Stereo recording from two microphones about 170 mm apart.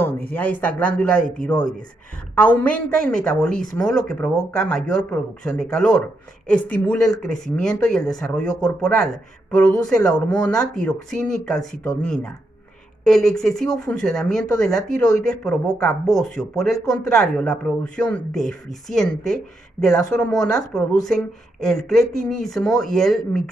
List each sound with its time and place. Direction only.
0.3 s speech: 10° left (ahead or behind)
2.3 s speech: 10° left (ahead or behind)
13.0 s speech: 5° left (ahead or behind)
16.7 s speech: 20° left (ahead or behind)
17.1 s speech: 5° left (ahead or behind)